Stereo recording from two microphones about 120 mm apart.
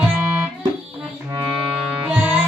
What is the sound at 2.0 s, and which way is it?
Music, 15° right (ahead or behind).